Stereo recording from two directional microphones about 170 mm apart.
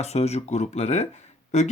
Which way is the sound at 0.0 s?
40° left (ahead or behind).